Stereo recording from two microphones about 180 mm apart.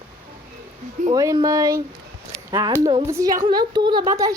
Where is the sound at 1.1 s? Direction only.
20° right (ahead or behind).